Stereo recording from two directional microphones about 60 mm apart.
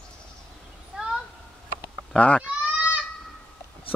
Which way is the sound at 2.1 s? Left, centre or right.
Left.